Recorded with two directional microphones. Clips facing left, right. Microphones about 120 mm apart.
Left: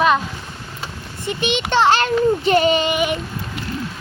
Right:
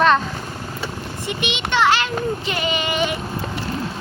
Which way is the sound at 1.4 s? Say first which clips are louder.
Left 3 dB; 40° left (ahead or behind).